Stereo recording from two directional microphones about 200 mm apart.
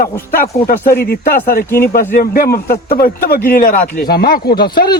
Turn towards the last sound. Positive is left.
turn(degrees=50)  # may be behind; listen again after turning